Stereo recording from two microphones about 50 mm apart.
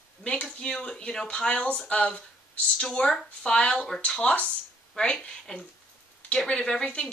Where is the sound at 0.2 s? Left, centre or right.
Centre.